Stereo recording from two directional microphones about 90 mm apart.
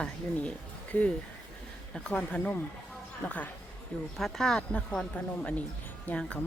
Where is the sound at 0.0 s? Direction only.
15° left (ahead or behind).